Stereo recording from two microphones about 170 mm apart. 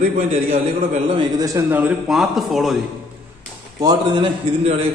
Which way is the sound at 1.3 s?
20° right (ahead or behind).